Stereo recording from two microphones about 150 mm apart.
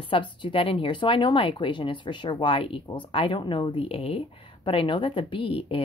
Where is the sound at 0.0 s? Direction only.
35° left (ahead or behind).